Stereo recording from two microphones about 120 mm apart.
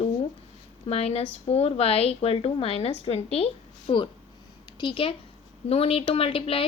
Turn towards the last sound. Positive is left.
turn(degrees=50)  # may be behind; listen again after turning